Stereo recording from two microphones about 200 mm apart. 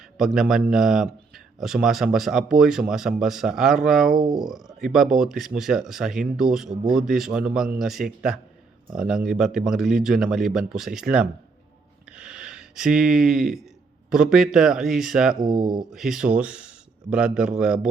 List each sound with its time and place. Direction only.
0.2 s speech: centre (ahead or behind)
12.1 s a sound: 5° right (ahead or behind)
14.1 s speech: centre (ahead or behind)
15.4 s speech: 20° right (ahead or behind)
15.9 s speech: centre (ahead or behind)